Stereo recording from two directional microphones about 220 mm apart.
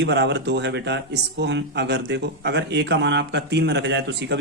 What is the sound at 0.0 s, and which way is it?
Speech, 50° right (ahead or behind).